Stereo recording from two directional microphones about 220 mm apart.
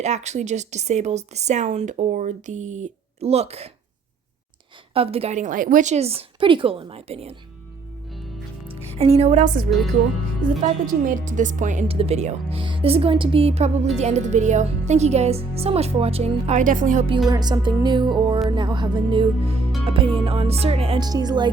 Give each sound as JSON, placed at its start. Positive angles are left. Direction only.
{"t": 0.0, "sound": "speech", "side_deg": -30}
{"t": 4.9, "sound": "a woman's voice", "side_deg": -25}
{"t": 8.7, "sound": "a woman's voice", "side_deg": -30}
{"t": 17.2, "sound": "a woman's voice", "side_deg": -20}